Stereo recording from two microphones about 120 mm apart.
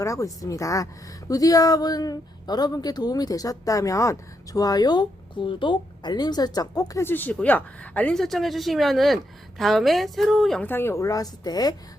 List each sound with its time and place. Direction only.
0.0 s speech: 25° left (ahead or behind)
7.1 s speech: 15° left (ahead or behind)
10.6 s speech: 20° left (ahead or behind); by 11.7 s 35° left (ahead or behind)